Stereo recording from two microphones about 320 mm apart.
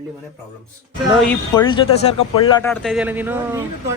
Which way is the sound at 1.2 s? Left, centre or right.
Centre.